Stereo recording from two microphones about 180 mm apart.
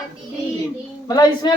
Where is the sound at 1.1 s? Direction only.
20° left (ahead or behind).